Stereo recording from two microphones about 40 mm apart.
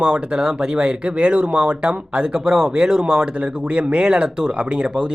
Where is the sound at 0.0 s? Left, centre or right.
Right.